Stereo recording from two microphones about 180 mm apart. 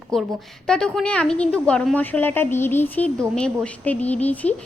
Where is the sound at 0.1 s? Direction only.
Centre (ahead or behind).